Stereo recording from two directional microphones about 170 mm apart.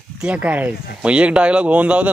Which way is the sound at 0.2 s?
5° right (ahead or behind).